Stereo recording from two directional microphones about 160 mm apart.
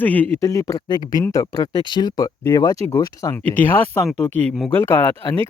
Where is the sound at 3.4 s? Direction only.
10° left (ahead or behind).